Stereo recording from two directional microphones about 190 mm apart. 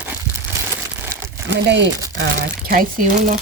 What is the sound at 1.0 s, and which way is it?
Crumpling, 15° right (ahead or behind).